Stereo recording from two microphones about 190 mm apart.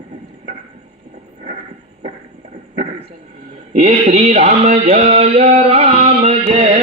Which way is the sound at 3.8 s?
35° right (ahead or behind).